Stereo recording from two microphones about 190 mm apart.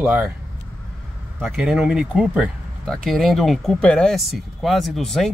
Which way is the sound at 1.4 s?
5° right (ahead or behind).